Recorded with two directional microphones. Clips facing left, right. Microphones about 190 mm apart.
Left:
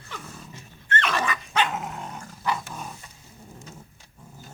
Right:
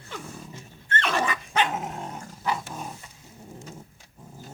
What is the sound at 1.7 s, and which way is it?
Dog, 25° right (ahead or behind).